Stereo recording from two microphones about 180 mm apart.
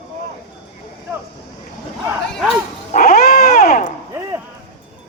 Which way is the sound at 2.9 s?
55° left (ahead or behind).